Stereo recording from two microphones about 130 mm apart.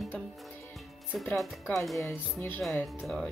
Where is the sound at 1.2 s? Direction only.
5° left (ahead or behind).